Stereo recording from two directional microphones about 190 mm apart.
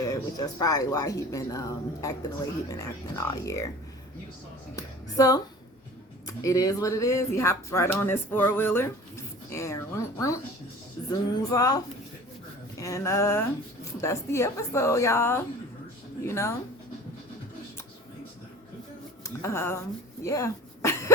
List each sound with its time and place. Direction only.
0.0 s speech: 20° left (ahead or behind)
4.8 s speech: 20° left (ahead or behind)
11.1 s music: 20° left (ahead or behind)
12.8 s speech: 15° left (ahead or behind)
19.2 s speech: 15° left (ahead or behind)
20.2 s cough: 15° left (ahead or behind)